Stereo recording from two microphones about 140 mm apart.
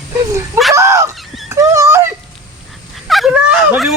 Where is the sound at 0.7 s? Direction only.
20° right (ahead or behind).